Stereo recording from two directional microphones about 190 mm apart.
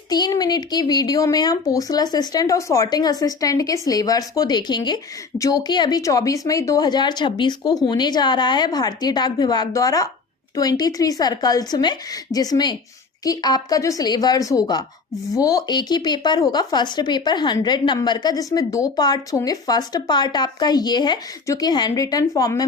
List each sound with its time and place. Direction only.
0.1 s speech: 20° left (ahead or behind)